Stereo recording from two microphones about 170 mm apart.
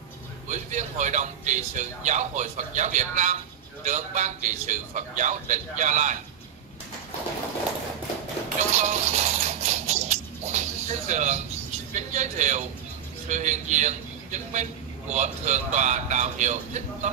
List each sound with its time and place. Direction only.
0.5 s a man's voice: 45° right (ahead or behind)
8.7 s shuffle: 45° right (ahead or behind)
11.9 s a man's voice: 45° right (ahead or behind)